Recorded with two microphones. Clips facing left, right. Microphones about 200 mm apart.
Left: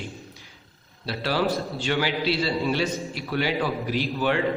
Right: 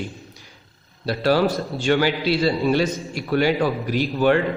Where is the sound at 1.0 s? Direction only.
45° right (ahead or behind).